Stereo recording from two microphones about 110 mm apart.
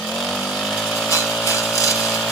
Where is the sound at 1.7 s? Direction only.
25° left (ahead or behind).